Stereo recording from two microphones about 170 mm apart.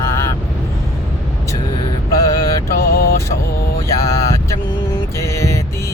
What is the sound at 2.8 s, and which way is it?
Vehicle, 65° left (ahead or behind).